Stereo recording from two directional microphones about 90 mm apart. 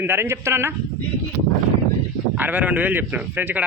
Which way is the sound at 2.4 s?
20° right (ahead or behind).